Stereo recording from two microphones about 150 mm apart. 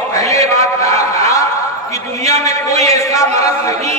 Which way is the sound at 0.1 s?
20° left (ahead or behind).